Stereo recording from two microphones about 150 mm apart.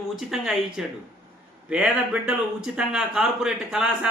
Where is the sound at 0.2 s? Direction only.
Centre (ahead or behind).